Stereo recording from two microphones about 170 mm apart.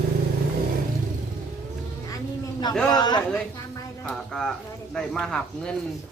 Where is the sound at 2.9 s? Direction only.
25° left (ahead or behind).